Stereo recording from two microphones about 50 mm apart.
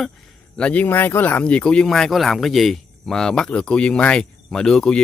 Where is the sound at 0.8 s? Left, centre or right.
Left.